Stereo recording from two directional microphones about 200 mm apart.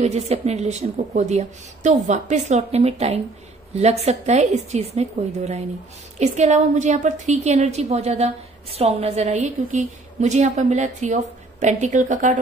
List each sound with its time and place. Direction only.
0.0 s a woman's voice: 35° right (ahead or behind)